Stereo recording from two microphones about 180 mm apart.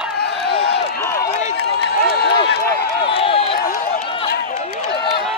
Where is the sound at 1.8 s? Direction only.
65° left (ahead or behind).